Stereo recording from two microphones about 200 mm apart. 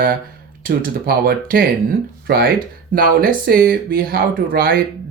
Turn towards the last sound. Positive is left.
turn(degrees=-45)  # may be behind; listen again after turning